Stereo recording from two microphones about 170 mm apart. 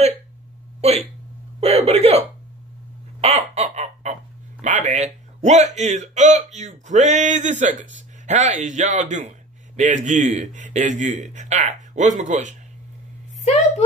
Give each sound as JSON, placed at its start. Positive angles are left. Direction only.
{"t": 0.7, "sound": "speech", "side_deg": -40}
{"t": 3.2, "sound": "a sound", "side_deg": -35}
{"t": 9.8, "sound": "a man's voice", "side_deg": -45}
{"t": 13.4, "sound": "a woman's voice", "side_deg": 40}